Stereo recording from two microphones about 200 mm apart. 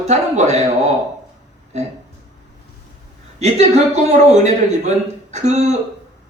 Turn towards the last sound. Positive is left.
turn(degrees=-35)  # may be behind; listen again after turning